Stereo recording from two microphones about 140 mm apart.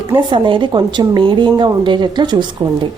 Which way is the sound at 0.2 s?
35° right (ahead or behind).